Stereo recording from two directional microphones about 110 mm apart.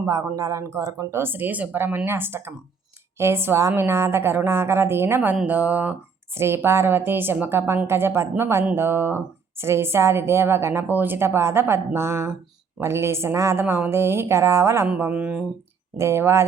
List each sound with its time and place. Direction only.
0.0 s a woman's voice: 30° right (ahead or behind); by 15.4 s 10° right (ahead or behind)
16.0 s a woman's voice: 25° right (ahead or behind)